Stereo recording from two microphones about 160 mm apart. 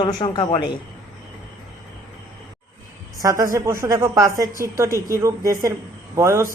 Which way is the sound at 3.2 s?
20° right (ahead or behind).